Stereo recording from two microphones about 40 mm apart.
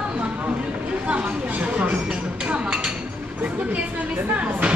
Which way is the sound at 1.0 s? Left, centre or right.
Right.